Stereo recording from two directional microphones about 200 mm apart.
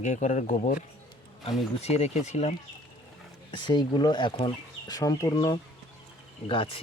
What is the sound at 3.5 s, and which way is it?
Speech, 20° left (ahead or behind).